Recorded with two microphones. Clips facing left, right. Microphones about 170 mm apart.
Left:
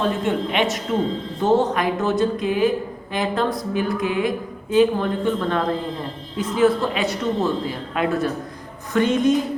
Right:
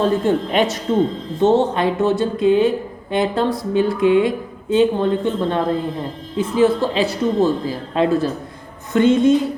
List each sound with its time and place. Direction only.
0.0 s a woman's voice: 35° right (ahead or behind)
1.4 s speech: 25° right (ahead or behind)